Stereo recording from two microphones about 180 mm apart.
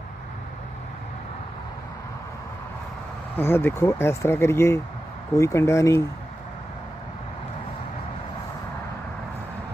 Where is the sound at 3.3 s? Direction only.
10° left (ahead or behind).